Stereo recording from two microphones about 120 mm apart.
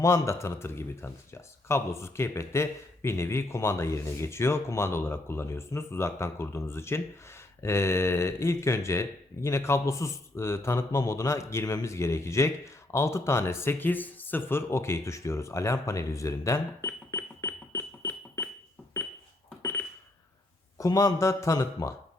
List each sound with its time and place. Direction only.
0.0 s speech: 25° left (ahead or behind)
20.7 s speech: 30° left (ahead or behind)